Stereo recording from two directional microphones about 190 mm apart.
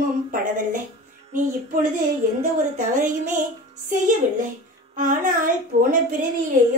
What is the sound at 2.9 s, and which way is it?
A child's voice, 45° right (ahead or behind).